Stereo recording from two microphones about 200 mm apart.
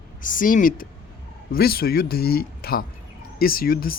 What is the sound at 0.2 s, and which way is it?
Speech, 40° left (ahead or behind).